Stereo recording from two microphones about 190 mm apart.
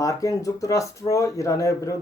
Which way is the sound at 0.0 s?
15° left (ahead or behind).